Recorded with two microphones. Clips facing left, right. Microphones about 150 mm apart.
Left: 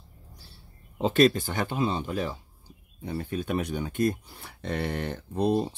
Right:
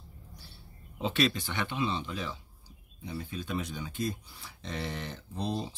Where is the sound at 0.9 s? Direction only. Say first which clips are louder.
Left 8 dB; 45° left (ahead or behind).